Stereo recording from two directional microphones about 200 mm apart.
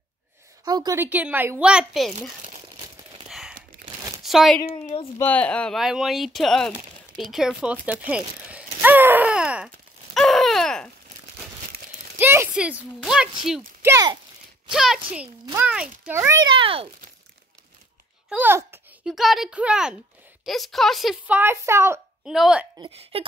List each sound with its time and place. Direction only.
0.7 s speech: 20° right (ahead or behind); by 2.3 s centre (ahead or behind)
3.3 s a sound: 5° right (ahead or behind)
4.2 s speech: centre (ahead or behind)
4.6 s a woman's voice: 25° left (ahead or behind)
5.2 s speech: 5° left (ahead or behind)
8.1 s a sound: 5° right (ahead or behind)
11.7 s crumpling: 45° right (ahead or behind)
12.2 s a sound: 10° right (ahead or behind)
13.8 s speech: 20° right (ahead or behind)
14.7 s a child's voice: centre (ahead or behind); by 16.9 s 25° right (ahead or behind)
18.3 s a child's voice: 10° right (ahead or behind)
22.3 s speech: 5° right (ahead or behind)
22.8 s speech: 30° right (ahead or behind)